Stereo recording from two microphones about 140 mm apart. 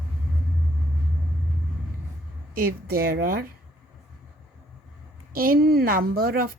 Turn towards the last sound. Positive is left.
turn(degrees=-90)